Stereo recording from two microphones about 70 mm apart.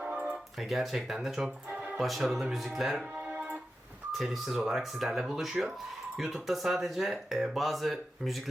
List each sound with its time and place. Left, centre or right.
0.0 s a sound: centre
0.7 s speech: centre
4.2 s speech: centre